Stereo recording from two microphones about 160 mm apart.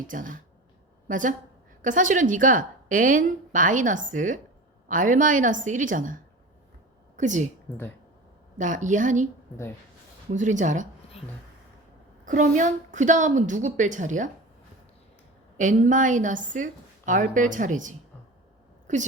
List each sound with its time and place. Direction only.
0.1 s a woman's voice: 55° right (ahead or behind)
8.5 s a woman's voice: 50° right (ahead or behind)
12.2 s a woman's voice: 55° right (ahead or behind)
15.5 s a woman's voice: 50° right (ahead or behind)